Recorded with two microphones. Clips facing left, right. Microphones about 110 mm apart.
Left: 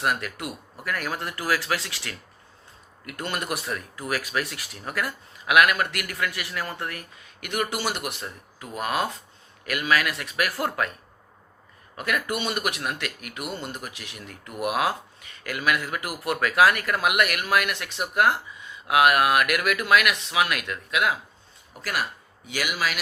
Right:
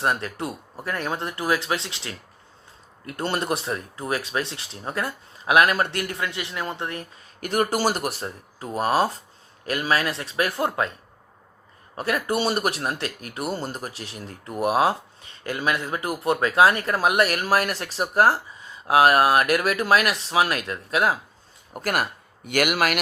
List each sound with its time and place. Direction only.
0.0 s speech: 30° right (ahead or behind)
7.4 s speech: 40° right (ahead or behind)
11.9 s speech: 30° right (ahead or behind)
21.7 s speech: 50° right (ahead or behind)